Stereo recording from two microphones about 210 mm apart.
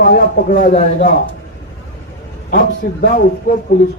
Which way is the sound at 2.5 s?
45° left (ahead or behind).